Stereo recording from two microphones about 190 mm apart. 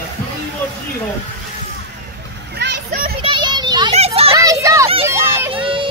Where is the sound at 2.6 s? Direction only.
55° right (ahead or behind).